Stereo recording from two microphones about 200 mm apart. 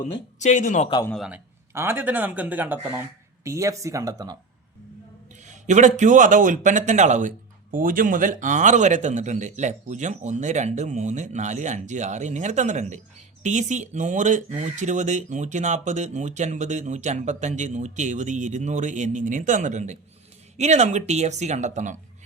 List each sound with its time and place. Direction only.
0.3 s speech: 35° left (ahead or behind)
1.0 s a man's voice: centre (ahead or behind)
1.7 s speech: 10° right (ahead or behind)
5.5 s a man's voice: 35° right (ahead or behind)